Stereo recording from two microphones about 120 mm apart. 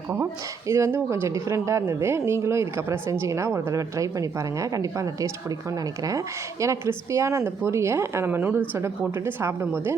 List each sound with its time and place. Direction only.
0.7 s speech: 25° right (ahead or behind)